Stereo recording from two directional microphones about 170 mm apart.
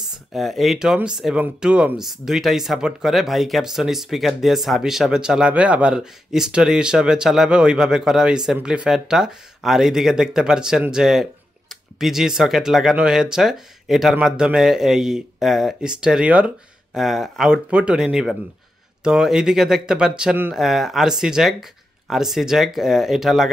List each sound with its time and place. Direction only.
0.3 s speech: centre (ahead or behind)